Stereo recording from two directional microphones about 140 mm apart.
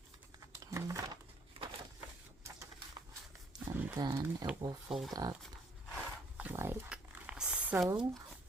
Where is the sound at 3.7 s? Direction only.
10° right (ahead or behind).